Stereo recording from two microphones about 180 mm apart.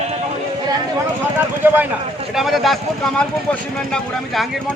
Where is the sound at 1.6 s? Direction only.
10° right (ahead or behind).